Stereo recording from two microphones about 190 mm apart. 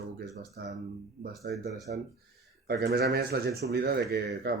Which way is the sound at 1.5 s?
55° right (ahead or behind).